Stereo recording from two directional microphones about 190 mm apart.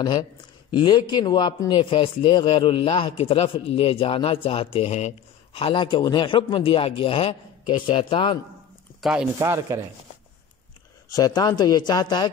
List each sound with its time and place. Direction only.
0.0 s a man's voice: 20° left (ahead or behind)
9.0 s speech: 5° right (ahead or behind)
11.1 s a man's voice: 20° left (ahead or behind)